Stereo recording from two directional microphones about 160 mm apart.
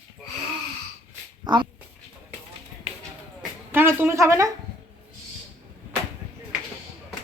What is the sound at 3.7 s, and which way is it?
Speech, 15° right (ahead or behind).